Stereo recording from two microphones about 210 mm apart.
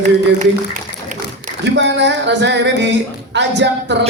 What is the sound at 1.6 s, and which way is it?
A woman's voice, 55° right (ahead or behind).